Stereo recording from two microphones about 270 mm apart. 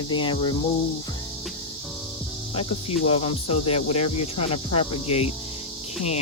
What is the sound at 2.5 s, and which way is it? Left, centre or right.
Speech, left.